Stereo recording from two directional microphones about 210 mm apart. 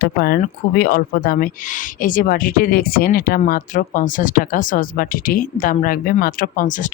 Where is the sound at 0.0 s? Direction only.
45° left (ahead or behind).